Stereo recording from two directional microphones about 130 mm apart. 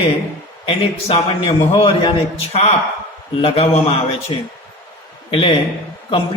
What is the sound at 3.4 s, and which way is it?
Speech, 50° left (ahead or behind).